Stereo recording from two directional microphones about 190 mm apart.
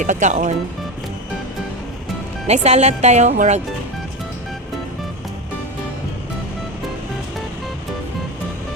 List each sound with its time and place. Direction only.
0.0 s speech: 40° right (ahead or behind)
2.5 s speech: 35° right (ahead or behind)